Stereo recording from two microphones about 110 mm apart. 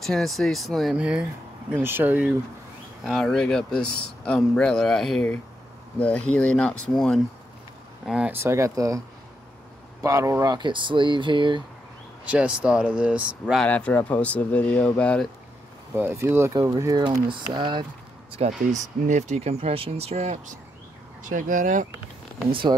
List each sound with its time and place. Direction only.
0.0 s speech: 5° left (ahead or behind)
0.9 s speech: 10° right (ahead or behind)
3.0 s speech: centre (ahead or behind)
8.0 s speech: 5° right (ahead or behind)
8.3 s speech: 25° right (ahead or behind)
10.0 s speech: 30° right (ahead or behind)
10.4 s speech: 40° right (ahead or behind)
12.3 s speech: 10° right (ahead or behind)
13.7 s speech: 10° left (ahead or behind)
15.9 s speech: 25° right (ahead or behind)
16.7 s speech: 35° right (ahead or behind)
18.3 s speech: 80° right
22.5 s speech: 50° right (ahead or behind)